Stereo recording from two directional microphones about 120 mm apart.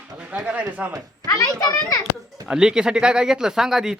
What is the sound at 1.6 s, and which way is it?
Children playing, 30° left (ahead or behind).